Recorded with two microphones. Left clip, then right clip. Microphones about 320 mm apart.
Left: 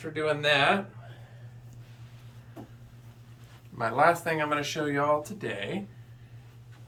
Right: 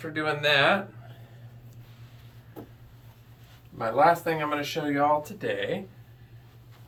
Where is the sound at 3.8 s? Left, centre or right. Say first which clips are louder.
Right 2 dB; centre.